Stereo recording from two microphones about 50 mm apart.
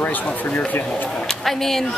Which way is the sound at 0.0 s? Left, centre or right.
Left.